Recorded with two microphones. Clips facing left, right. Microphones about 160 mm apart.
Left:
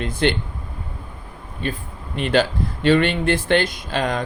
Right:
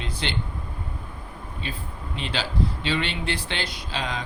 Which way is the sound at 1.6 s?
50° left (ahead or behind).